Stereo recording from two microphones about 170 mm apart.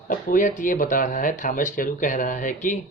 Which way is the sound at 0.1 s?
50° left (ahead or behind).